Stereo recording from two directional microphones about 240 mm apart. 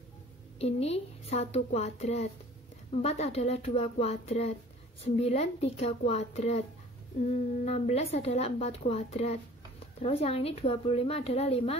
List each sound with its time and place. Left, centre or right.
0.6 s speech: left
7.6 s speech: left